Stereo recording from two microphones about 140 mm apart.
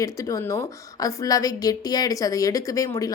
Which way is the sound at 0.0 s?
20° left (ahead or behind).